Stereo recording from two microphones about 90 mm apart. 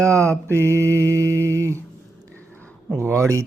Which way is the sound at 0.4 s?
25° left (ahead or behind).